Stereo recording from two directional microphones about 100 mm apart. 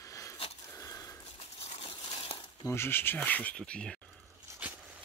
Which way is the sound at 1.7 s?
80° left.